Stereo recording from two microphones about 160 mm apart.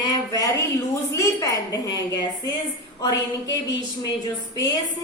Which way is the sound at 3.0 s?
20° left (ahead or behind).